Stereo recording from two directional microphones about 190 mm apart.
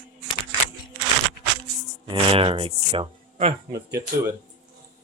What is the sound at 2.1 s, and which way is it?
Speech, 30° right (ahead or behind).